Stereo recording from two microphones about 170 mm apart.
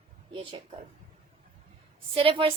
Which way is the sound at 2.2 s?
30° right (ahead or behind).